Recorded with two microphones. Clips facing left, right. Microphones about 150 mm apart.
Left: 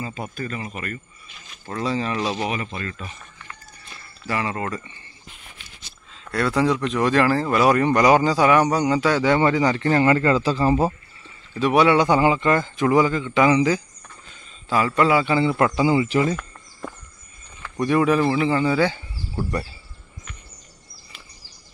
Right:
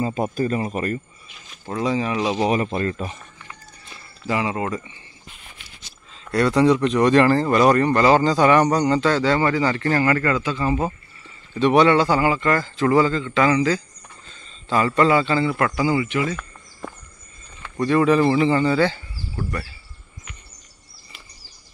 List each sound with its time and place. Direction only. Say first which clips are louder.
0.0 s speech: right 8 dB; 40° right (ahead or behind)
1.7 s speech: right 2 dB; 15° right (ahead or behind)
2.4 s speech: right 7 dB; 40° right (ahead or behind)
4.3 s speech: right 3 dB; 15° right (ahead or behind)
6.3 s speech: right 4 dB; centre (ahead or behind); by 11.0 s 30° left (ahead or behind)
11.5 s a man's voice: right 1 dB; 5° left (ahead or behind); by 16.1 s 25° left (ahead or behind)
16.1 s speech: left 3 dB; 35° left (ahead or behind)
17.7 s speech: right 2 dB; 10° left (ahead or behind)
19.3 s speech: left 3 dB; 25° left (ahead or behind)